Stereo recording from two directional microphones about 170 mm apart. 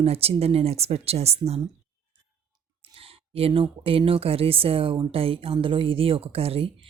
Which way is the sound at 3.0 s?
35° right (ahead or behind).